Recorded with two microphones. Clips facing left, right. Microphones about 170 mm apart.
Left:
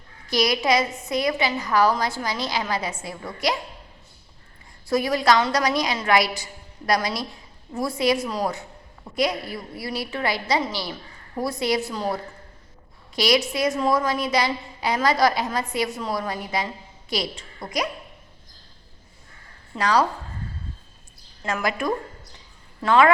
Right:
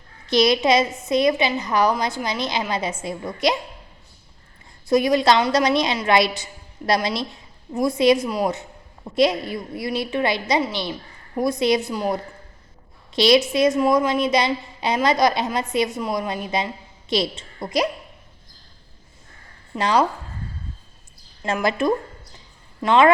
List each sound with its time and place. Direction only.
0.3 s a woman's voice: 25° right (ahead or behind)
4.9 s a woman's voice: 20° right (ahead or behind)
19.8 s a woman's voice: 25° right (ahead or behind)
21.4 s a woman's voice: 25° right (ahead or behind)